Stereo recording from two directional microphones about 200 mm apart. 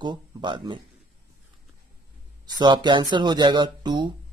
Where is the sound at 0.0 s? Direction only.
25° right (ahead or behind).